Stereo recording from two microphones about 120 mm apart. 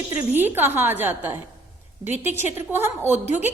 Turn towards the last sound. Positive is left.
turn(degrees=80)